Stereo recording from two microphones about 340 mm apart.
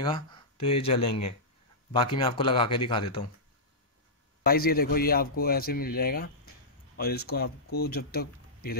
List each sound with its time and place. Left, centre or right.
0.0 s speech: centre
4.5 s speech: left